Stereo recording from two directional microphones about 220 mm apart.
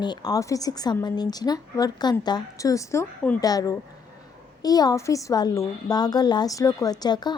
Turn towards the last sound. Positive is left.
turn(degrees=20)  # may be behind; listen again after turning